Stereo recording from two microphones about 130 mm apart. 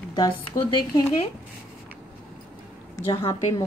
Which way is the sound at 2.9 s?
30° left (ahead or behind).